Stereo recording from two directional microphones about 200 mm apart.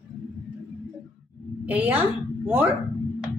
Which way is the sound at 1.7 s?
5° right (ahead or behind).